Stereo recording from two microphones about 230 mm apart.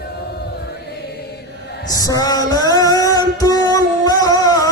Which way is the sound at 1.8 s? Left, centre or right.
Centre.